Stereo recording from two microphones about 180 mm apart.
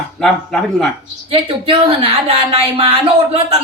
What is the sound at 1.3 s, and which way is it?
Speech, 30° right (ahead or behind).